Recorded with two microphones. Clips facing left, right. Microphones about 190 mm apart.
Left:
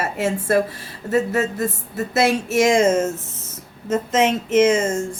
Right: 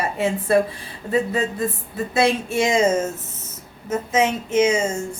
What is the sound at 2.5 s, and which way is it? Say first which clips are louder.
A woman's voice: left 3 dB; 90° left.